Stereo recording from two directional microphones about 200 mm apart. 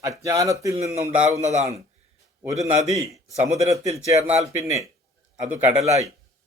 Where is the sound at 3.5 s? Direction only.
35° right (ahead or behind).